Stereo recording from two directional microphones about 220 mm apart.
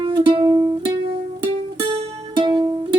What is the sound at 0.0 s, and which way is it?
Music, 25° right (ahead or behind).